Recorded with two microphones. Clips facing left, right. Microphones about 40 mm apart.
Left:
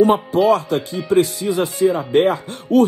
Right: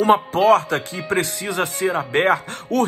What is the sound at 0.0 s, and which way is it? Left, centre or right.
Speech, right.